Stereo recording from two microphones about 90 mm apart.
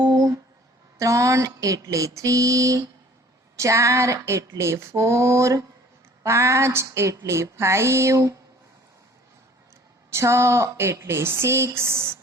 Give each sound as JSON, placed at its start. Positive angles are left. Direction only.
{"t": 0.0, "sound": "a sound", "side_deg": -45}
{"t": 0.9, "sound": "female singing", "side_deg": -35}
{"t": 10.1, "sound": "speech", "side_deg": -30}